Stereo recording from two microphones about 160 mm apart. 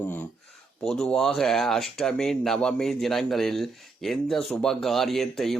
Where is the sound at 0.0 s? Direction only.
10° left (ahead or behind).